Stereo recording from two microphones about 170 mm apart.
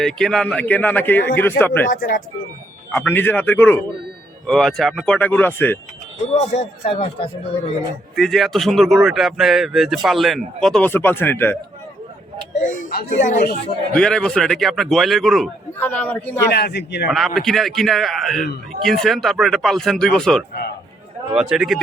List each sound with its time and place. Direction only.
0.0 s speech: 5° left (ahead or behind)
1.9 s speech: 55° left (ahead or behind)
2.9 s speech: 10° left (ahead or behind)
6.2 s speech: 40° left (ahead or behind)
8.1 s speech: centre (ahead or behind)
12.6 s speech: 50° left (ahead or behind)
13.1 s speech: 45° left (ahead or behind)
13.9 s speech: 5° left (ahead or behind)
16.5 s a man's voice: 75° left (ahead or behind)
17.1 s speech: centre (ahead or behind)